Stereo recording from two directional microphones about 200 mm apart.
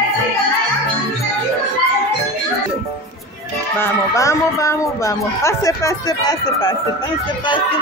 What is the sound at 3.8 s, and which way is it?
Speech, 15° left (ahead or behind).